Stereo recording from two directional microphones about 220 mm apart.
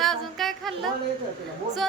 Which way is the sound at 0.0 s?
Centre (ahead or behind).